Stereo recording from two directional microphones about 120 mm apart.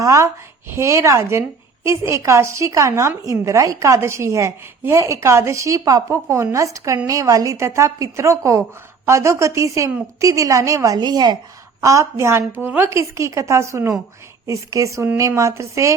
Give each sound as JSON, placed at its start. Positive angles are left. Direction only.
{"t": 0.0, "sound": "a woman's voice", "side_deg": -25}